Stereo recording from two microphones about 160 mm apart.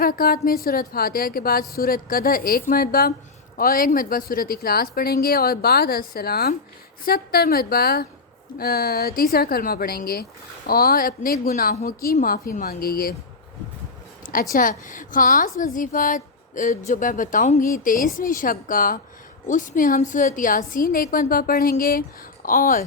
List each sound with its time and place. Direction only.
0.0 s a woman's voice: 65° left (ahead or behind)
14.5 s a woman's voice: 55° left (ahead or behind)